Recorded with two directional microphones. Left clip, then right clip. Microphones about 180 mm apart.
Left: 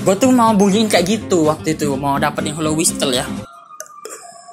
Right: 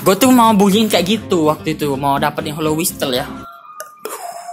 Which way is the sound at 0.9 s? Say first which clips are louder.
Even; 10° right (ahead or behind).